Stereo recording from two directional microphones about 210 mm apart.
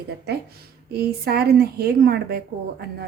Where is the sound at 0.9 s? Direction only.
50° right (ahead or behind).